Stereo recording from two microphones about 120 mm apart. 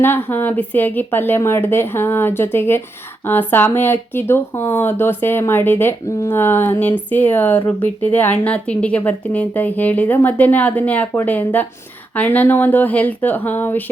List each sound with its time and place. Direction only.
0.0 s speech: 15° left (ahead or behind)